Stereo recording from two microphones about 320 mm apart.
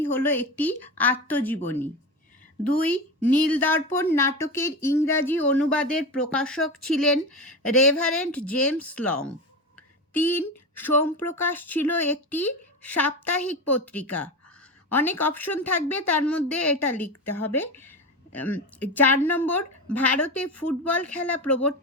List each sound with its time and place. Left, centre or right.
0.0 s a woman's voice: centre
8.3 s a woman's voice: centre
20.5 s speech: left
20.8 s a woman's voice: centre
21.4 s speech: left